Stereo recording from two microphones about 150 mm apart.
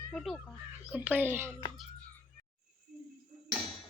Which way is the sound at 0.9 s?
10° right (ahead or behind).